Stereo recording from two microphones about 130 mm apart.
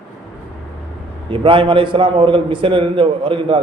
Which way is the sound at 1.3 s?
40° right (ahead or behind).